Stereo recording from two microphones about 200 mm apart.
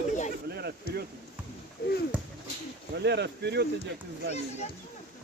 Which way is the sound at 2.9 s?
60° right (ahead or behind).